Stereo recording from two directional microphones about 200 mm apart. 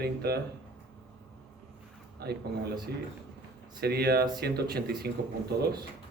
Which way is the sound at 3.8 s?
50° right (ahead or behind).